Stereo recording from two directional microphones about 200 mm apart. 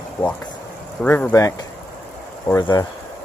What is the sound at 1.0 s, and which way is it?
Speech, 10° left (ahead or behind).